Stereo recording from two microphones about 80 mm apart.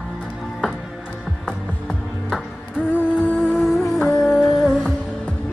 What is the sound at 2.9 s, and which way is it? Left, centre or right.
Music, centre.